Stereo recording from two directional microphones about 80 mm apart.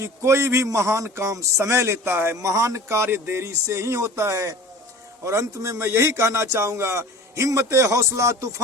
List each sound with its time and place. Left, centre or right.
0.0 s a man's voice: right